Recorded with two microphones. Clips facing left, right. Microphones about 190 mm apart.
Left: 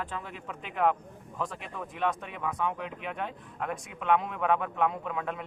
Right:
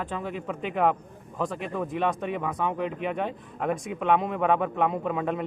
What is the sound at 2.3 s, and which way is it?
Speech, 25° right (ahead or behind).